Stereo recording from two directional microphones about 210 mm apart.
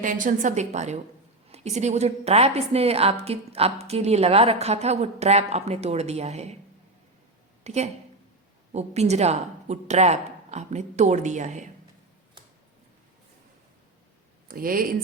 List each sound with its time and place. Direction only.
0.0 s a woman's voice: 40° right (ahead or behind)
7.6 s a woman's voice: 30° right (ahead or behind)
14.4 s speech: 45° right (ahead or behind)